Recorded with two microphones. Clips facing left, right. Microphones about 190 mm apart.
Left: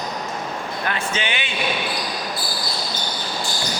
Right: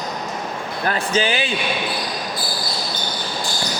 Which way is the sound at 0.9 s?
35° right (ahead or behind).